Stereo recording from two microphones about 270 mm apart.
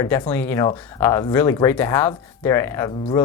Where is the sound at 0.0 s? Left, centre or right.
Centre.